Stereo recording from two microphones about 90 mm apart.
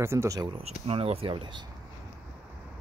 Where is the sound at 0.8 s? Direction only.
90° right; by 1.6 s 60° right (ahead or behind).